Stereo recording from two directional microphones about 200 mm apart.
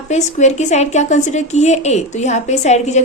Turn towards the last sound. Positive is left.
turn(degrees=35)  # may be behind; listen again after turning